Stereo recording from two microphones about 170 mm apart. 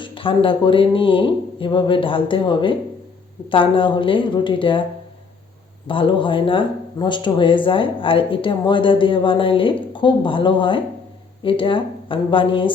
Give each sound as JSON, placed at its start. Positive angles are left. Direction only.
{"t": 0.0, "sound": "speech", "side_deg": 30}
{"t": 5.9, "sound": "speech", "side_deg": 30}